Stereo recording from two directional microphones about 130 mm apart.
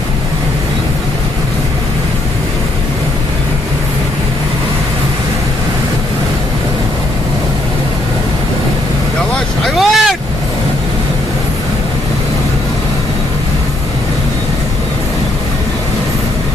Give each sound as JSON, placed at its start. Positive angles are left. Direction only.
{"t": 9.7, "sound": "boat", "side_deg": 0}